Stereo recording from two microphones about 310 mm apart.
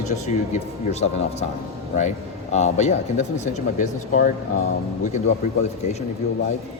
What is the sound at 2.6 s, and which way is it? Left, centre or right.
A man's voice, left.